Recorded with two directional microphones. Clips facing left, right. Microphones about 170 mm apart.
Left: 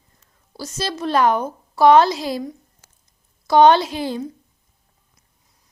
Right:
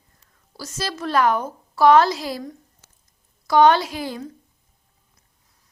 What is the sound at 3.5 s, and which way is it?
Speech, 25° left (ahead or behind).